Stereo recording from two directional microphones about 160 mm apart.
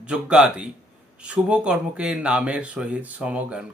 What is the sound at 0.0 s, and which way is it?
Speech, 5° right (ahead or behind).